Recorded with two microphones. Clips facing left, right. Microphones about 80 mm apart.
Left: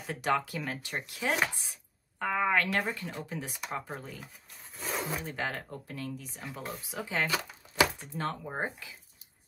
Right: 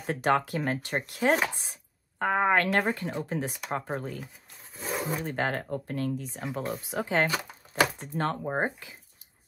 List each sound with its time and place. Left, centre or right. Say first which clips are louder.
0.0 s speech: right 5 dB; right
5.2 s speech: right 6 dB; right
7.7 s door: right 2 dB; right
8.5 s speech: right 6 dB; right